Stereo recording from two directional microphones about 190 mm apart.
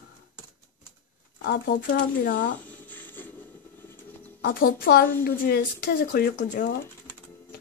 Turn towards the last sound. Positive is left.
turn(degrees=60)  # may be behind; listen again after turning